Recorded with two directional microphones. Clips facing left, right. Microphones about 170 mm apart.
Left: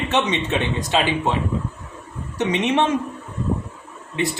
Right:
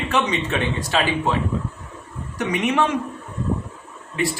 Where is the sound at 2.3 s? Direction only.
25° left (ahead or behind).